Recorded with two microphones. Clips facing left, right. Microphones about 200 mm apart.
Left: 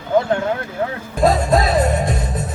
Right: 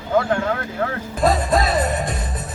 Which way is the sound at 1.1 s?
Centre (ahead or behind).